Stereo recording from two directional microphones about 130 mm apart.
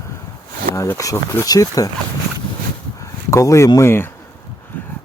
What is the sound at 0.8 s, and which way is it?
Speech, 25° left (ahead or behind).